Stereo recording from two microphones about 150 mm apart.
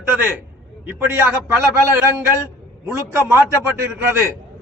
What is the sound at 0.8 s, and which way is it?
Speech, 15° right (ahead or behind).